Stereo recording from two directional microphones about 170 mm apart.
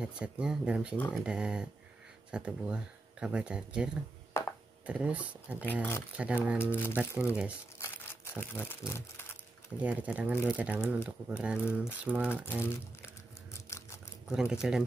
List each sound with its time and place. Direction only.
0.0 s speech: 5° right (ahead or behind)
4.4 s a sound: 15° left (ahead or behind)
4.8 s speech: 5° right (ahead or behind)
5.7 s speech: 15° left (ahead or behind)
6.1 s speech: 10° right (ahead or behind)
6.7 s speech: 10° left (ahead or behind)
9.8 s speech: 10° right (ahead or behind)
12.6 s crumpling: 15° left (ahead or behind)
14.3 s speech: 5° right (ahead or behind)